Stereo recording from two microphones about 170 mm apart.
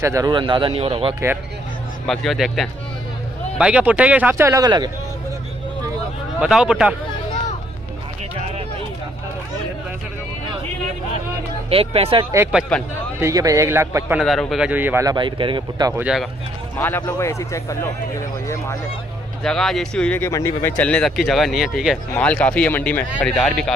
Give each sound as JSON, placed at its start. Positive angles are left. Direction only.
{"t": 0.0, "sound": "speech", "side_deg": -20}
{"t": 2.0, "sound": "speech", "side_deg": 0}
{"t": 4.6, "sound": "speech", "side_deg": -25}
{"t": 6.4, "sound": "speech", "side_deg": -5}
{"t": 11.7, "sound": "speech", "side_deg": -35}
{"t": 13.2, "sound": "speech", "side_deg": -20}
{"t": 14.2, "sound": "speech", "side_deg": 0}
{"t": 15.1, "sound": "speech", "side_deg": -30}
{"t": 16.0, "sound": "speech", "side_deg": -5}
{"t": 16.7, "sound": "a man's voice", "side_deg": 15}
{"t": 19.4, "sound": "a man's voice", "side_deg": 0}